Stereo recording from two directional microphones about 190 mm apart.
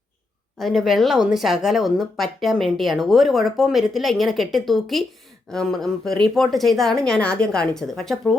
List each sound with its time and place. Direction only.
0.6 s speech: centre (ahead or behind)